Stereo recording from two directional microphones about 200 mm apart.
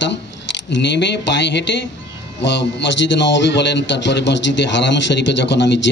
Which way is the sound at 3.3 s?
60° left (ahead or behind).